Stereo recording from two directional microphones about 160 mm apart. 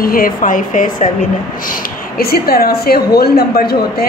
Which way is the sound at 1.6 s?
70° left (ahead or behind).